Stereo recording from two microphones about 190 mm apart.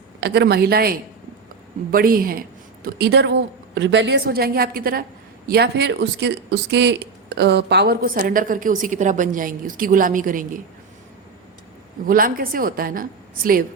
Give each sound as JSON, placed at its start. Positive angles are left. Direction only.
{"t": 0.2, "sound": "a woman's voice", "side_deg": -60}
{"t": 3.8, "sound": "speech", "side_deg": -70}
{"t": 12.0, "sound": "speech", "side_deg": -50}